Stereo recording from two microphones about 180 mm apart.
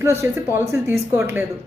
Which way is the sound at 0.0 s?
15° right (ahead or behind).